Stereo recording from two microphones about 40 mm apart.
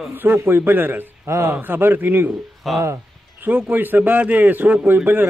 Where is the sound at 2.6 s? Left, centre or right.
Centre.